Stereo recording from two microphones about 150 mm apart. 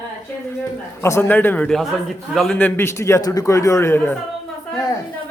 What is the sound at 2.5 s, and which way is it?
A man's voice, 15° left (ahead or behind).